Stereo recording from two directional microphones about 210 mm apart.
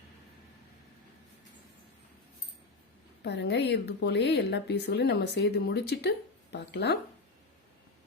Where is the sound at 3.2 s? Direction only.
55° left (ahead or behind).